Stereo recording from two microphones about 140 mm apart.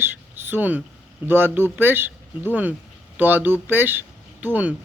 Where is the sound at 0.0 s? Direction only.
15° right (ahead or behind).